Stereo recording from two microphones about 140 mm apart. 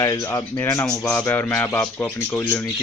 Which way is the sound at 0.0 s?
20° left (ahead or behind).